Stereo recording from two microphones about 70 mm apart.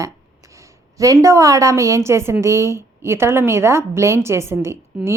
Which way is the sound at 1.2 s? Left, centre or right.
Right.